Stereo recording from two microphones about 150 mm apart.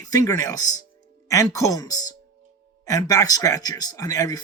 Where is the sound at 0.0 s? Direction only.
25° left (ahead or behind).